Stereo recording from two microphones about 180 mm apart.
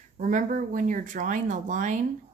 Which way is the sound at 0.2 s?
45° right (ahead or behind).